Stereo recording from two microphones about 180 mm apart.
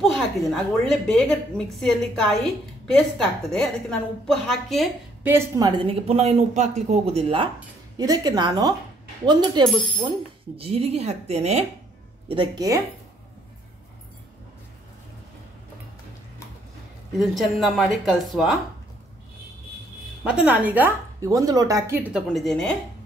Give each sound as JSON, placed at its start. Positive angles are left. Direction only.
{"t": 0.0, "sound": "a woman's voice", "side_deg": 0}
{"t": 5.2, "sound": "speech", "side_deg": -15}
{"t": 5.7, "sound": "speech", "side_deg": -35}
{"t": 8.0, "sound": "a woman's voice", "side_deg": -20}
{"t": 10.6, "sound": "speech", "side_deg": -35}
{"t": 12.3, "sound": "a woman's voice", "side_deg": -25}
{"t": 17.2, "sound": "a woman's voice", "side_deg": 0}
{"t": 20.2, "sound": "speech", "side_deg": -5}